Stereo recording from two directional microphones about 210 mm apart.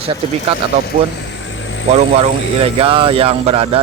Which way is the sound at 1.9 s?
30° right (ahead or behind).